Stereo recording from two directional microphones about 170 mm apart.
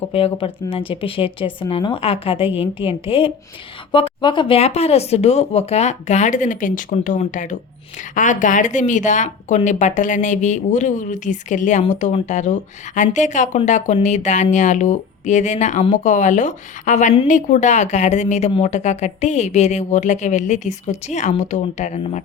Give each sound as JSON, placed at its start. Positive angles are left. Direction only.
{"t": 0.1, "sound": "speech", "side_deg": 35}